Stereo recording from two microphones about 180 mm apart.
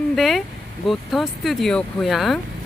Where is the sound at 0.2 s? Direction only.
Centre (ahead or behind).